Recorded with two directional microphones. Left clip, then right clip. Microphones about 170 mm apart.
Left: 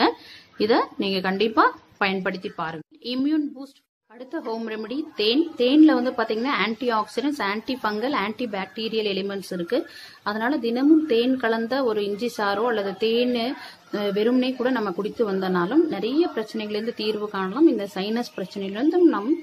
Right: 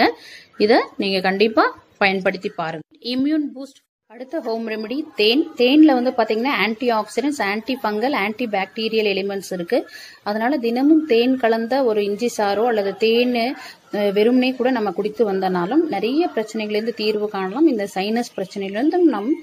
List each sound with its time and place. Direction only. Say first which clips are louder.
0.6 s a woman's voice: right 5 dB; 15° right (ahead or behind)